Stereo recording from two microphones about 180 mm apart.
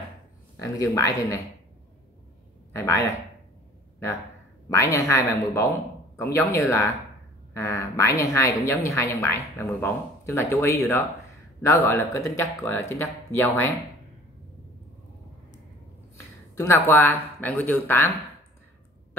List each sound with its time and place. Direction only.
0.6 s a woman's voice: 15° left (ahead or behind)
2.7 s a woman's voice: 15° left (ahead or behind)
4.6 s a woman's voice: 15° left (ahead or behind)
16.5 s a woman's voice: 15° left (ahead or behind)